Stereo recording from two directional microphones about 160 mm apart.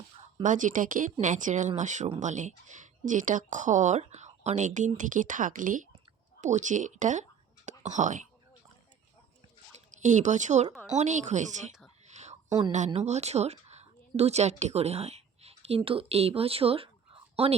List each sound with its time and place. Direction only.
0.4 s a woman's voice: 55° right (ahead or behind)
10.0 s a woman's voice: 50° right (ahead or behind)
12.0 s whispering: 45° right (ahead or behind)
12.5 s speech: 25° right (ahead or behind)
12.7 s a woman's voice: 45° right (ahead or behind)